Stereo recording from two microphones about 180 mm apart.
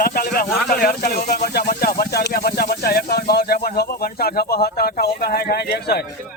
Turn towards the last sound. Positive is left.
turn(degrees=60)  # may be behind; listen again after turning